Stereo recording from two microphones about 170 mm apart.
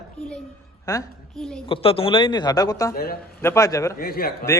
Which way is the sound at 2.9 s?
60° left (ahead or behind).